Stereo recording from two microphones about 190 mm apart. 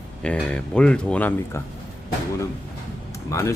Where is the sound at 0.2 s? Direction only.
5° left (ahead or behind).